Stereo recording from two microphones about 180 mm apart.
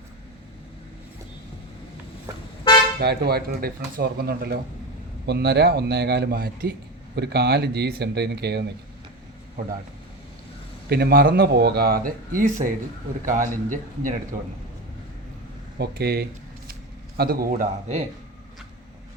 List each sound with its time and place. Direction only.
3.0 s speech: 65° right (ahead or behind)
7.2 s speech: 65° right (ahead or behind)
10.8 s a man's voice: 60° right (ahead or behind); by 14.2 s 45° right (ahead or behind)
15.8 s a man's voice: 60° right (ahead or behind); by 18.0 s 45° right (ahead or behind)